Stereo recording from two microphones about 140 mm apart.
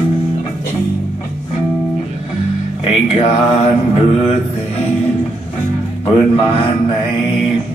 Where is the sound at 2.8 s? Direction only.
45° left (ahead or behind).